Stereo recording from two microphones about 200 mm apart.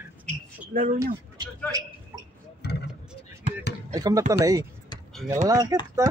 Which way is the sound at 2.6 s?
55° left (ahead or behind).